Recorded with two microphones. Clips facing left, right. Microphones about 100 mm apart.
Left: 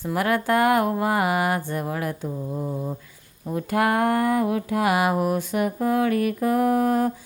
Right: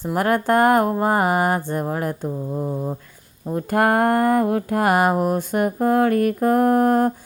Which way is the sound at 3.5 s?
45° right (ahead or behind).